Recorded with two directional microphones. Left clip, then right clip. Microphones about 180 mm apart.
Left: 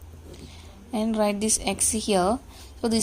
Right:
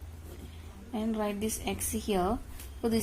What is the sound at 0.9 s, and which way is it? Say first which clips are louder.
A woman's voice: left 9 dB; 30° left (ahead or behind).